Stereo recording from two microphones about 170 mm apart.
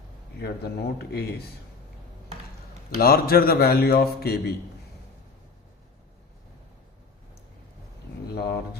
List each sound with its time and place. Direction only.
0.3 s speech: 70° left (ahead or behind)
3.0 s a man's voice: 60° left (ahead or behind)
8.4 s speech: 70° left (ahead or behind)